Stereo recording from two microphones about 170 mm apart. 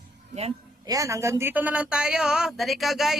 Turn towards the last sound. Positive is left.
turn(degrees=0)  # may be behind; listen again after turning